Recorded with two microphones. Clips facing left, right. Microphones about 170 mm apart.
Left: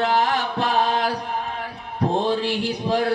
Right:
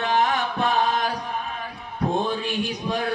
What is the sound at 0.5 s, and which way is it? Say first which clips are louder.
Chant: left 2 dB; 35° left (ahead or behind).